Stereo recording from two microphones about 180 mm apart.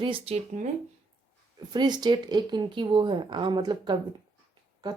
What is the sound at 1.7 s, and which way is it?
Speech, 25° right (ahead or behind).